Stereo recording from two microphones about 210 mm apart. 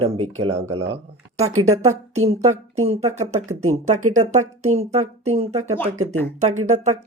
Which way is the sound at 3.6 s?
90° right.